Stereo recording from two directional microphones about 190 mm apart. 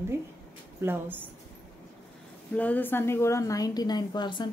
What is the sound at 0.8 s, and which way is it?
Speech, 10° right (ahead or behind).